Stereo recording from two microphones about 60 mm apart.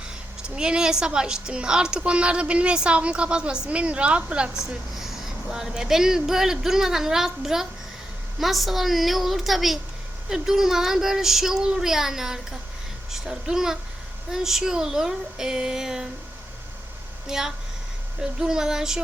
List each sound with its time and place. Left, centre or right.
0.4 s a woman's voice: centre
17.2 s a woman's voice: centre